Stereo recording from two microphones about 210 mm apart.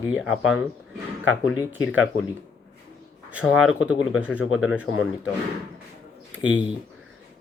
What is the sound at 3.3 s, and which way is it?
Speech, 5° right (ahead or behind).